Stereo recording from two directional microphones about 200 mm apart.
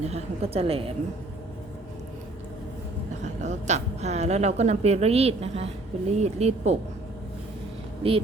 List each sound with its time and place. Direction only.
0.0 s a woman's voice: 30° right (ahead or behind)
3.2 s a woman's voice: 35° right (ahead or behind)
8.0 s a woman's voice: 25° right (ahead or behind)